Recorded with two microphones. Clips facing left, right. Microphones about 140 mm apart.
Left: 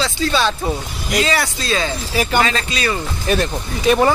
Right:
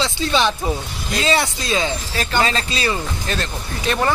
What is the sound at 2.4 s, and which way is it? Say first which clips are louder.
Speech: left 1 dB; 30° right (ahead or behind).